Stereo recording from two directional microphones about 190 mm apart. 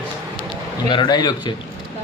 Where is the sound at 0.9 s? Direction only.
25° left (ahead or behind).